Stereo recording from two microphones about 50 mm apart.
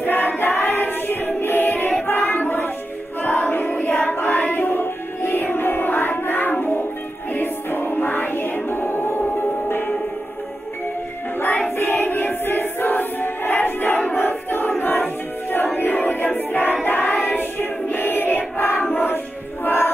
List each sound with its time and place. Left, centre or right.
0.0 s music: left
2.0 s a sound: left
3.2 s choir: left
7.3 s music: left
11.3 s music: left
11.7 s choir: left
14.1 s crowd: left
15.5 s a sound: left
16.8 s choir: left